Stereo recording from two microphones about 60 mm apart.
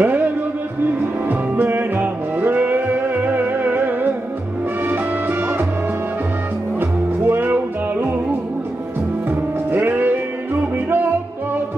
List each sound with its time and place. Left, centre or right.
0.0 s music: right
1.3 s music: right
6.8 s music: right
9.3 s music: right